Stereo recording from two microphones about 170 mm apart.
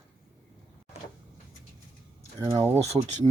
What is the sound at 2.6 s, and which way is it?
Speech, 40° right (ahead or behind).